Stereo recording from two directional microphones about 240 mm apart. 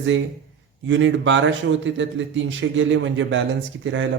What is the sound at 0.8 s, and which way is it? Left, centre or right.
A man's voice, right.